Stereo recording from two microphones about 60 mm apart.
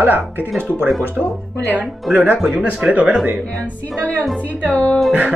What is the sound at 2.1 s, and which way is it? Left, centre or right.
Speech, centre.